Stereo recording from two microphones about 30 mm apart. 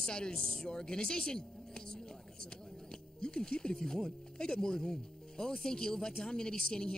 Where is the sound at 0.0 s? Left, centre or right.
Left.